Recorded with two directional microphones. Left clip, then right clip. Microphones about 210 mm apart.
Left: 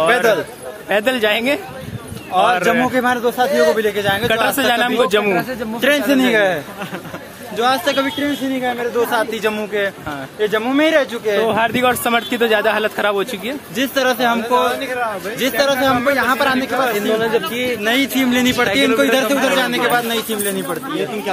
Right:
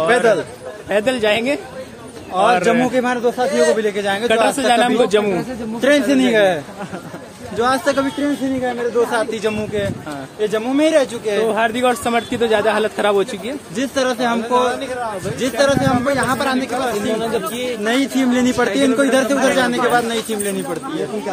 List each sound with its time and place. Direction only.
0.0 s a sound: 5° right (ahead or behind)
0.8 s speech: 5° left (ahead or behind)
4.3 s speech: 10° left (ahead or behind)
5.8 s a man's voice: 10° right (ahead or behind)
7.5 s speech: 30° right (ahead or behind)
8.6 s a man's voice: 15° right (ahead or behind); by 13.6 s 5° left (ahead or behind)
13.7 s a man's voice: 5° right (ahead or behind)
17.1 s speech: 35° left (ahead or behind)
17.8 s a man's voice: 20° right (ahead or behind)